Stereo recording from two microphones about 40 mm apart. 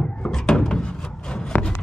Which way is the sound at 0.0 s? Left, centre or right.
Centre.